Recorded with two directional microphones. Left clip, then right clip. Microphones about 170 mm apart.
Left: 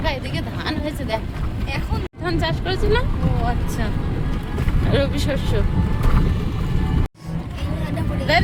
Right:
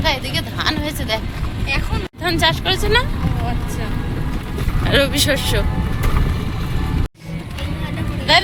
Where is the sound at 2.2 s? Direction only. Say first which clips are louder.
Right 7 dB; 5° left (ahead or behind).